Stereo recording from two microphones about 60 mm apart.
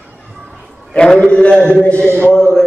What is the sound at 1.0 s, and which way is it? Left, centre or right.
A man's voice, centre.